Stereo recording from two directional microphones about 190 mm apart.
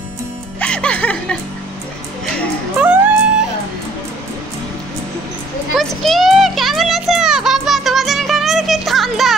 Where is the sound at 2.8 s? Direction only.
5° right (ahead or behind).